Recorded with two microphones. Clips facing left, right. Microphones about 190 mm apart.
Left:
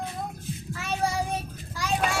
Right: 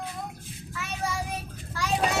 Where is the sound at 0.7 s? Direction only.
30° left (ahead or behind).